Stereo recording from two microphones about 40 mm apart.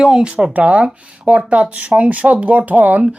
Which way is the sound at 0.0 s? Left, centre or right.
Centre.